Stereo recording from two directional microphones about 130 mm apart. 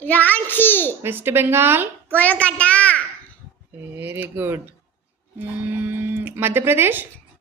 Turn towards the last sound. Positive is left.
turn(degrees=-15)  # may be behind; listen again after turning